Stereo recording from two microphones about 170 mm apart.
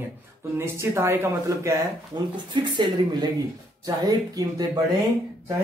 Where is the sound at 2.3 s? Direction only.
25° right (ahead or behind).